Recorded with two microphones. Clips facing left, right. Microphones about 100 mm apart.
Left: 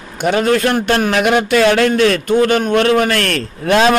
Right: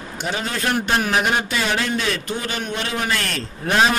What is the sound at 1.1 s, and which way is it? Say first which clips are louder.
A man's voice: left 7 dB; 90° left.